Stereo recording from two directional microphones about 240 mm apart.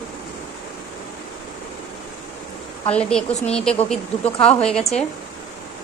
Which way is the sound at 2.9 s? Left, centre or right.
Centre.